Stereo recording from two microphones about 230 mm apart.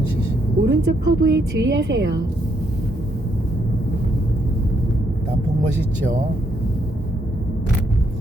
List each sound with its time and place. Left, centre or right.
0.6 s a woman's voice: right